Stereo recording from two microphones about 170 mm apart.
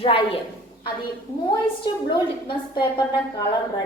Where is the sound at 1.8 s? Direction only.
30° left (ahead or behind).